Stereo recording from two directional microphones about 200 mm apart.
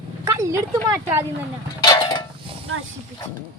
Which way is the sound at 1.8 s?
20° left (ahead or behind).